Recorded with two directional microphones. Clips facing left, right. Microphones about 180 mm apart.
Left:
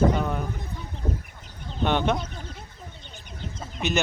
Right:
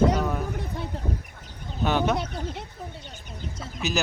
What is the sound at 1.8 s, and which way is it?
Speech, 5° right (ahead or behind).